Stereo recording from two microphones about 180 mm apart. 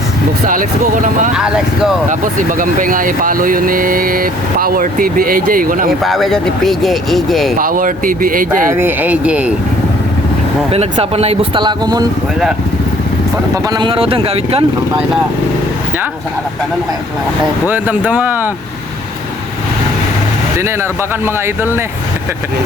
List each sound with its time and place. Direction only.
0.4 s speech: 50° right (ahead or behind)
1.3 s speech: 5° right (ahead or behind)
2.0 s speech: 45° right (ahead or behind)
6.0 s speech: centre (ahead or behind)
7.6 s speech: 50° right (ahead or behind)
8.7 s speech: 10° right (ahead or behind)
10.7 s speech: 35° right (ahead or behind)
13.7 s speech: 25° right (ahead or behind)
17.7 s speech: 10° right (ahead or behind)
21.2 s speech: 10° right (ahead or behind)